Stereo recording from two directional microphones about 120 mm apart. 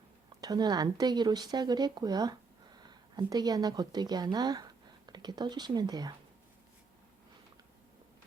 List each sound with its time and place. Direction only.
0.4 s speech: 35° right (ahead or behind)